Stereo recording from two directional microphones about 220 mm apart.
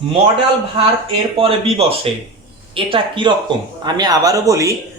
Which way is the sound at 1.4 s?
25° right (ahead or behind).